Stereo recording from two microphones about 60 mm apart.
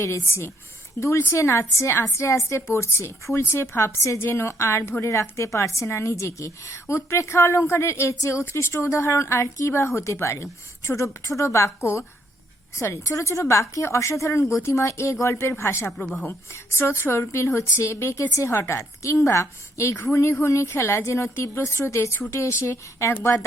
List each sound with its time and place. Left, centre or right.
0.0 s a woman's voice: left
1.9 s a woman's voice: left
2.1 s a woman's voice: left
18.5 s a woman's voice: left
18.8 s a woman's voice: left